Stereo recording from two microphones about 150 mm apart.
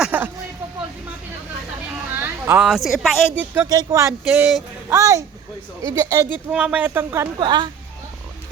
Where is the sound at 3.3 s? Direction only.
15° right (ahead or behind).